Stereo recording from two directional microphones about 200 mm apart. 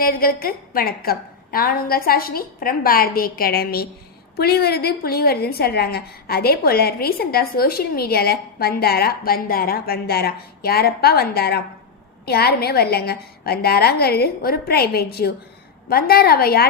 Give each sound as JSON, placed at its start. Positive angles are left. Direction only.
{"t": 0.0, "sound": "a woman's voice", "side_deg": 50}